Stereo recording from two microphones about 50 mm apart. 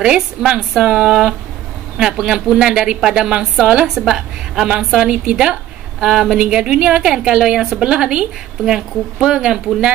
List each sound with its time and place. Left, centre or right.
0.0 s a woman's voice: centre